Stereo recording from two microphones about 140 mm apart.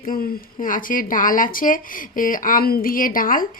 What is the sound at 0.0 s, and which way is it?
A woman's voice, 80° left.